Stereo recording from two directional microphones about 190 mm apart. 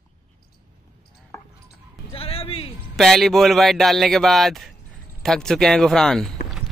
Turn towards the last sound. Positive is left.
turn(degrees=5)  # may be behind; listen again after turning